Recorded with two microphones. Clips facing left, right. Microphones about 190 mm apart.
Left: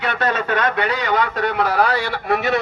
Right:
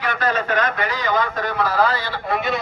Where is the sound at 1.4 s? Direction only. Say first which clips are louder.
Left 2 dB; 65° left (ahead or behind).